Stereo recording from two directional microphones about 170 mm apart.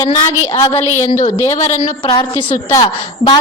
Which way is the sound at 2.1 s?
25° left (ahead or behind).